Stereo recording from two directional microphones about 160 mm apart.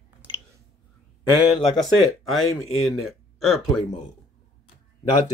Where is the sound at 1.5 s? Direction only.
Centre (ahead or behind).